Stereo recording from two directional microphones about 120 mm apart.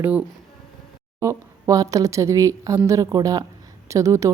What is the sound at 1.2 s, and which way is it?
A woman's voice, 25° right (ahead or behind).